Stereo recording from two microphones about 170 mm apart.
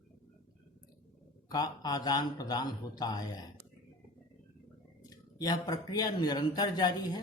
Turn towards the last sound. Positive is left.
turn(degrees=25)  # may be behind; listen again after turning